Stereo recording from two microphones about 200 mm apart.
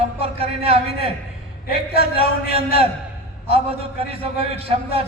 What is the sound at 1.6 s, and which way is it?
Speech, 50° left (ahead or behind).